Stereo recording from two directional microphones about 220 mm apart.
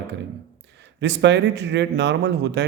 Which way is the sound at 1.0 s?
55° right (ahead or behind).